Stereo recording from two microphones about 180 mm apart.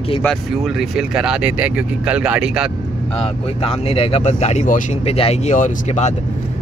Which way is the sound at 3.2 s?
30° left (ahead or behind).